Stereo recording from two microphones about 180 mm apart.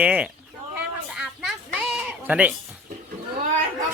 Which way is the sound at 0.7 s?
5° right (ahead or behind).